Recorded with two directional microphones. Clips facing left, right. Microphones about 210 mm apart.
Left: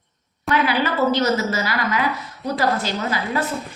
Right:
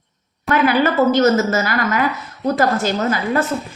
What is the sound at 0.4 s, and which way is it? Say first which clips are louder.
Speech: right 5 dB; 50° right (ahead or behind).